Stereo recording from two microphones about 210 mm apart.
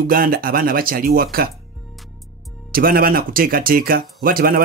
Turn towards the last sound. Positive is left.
turn(degrees=-45)  # may be behind; listen again after turning